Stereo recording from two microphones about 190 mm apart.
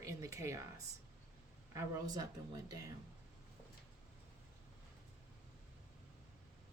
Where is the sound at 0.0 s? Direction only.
15° right (ahead or behind).